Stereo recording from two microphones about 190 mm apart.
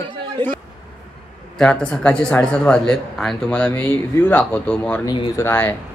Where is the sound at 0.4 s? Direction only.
25° right (ahead or behind).